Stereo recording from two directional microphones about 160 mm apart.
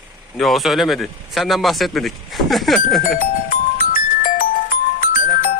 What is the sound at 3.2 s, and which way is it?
Music, 60° left (ahead or behind).